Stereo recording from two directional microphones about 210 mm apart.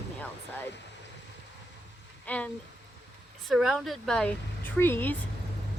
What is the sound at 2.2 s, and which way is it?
Speech, 5° left (ahead or behind).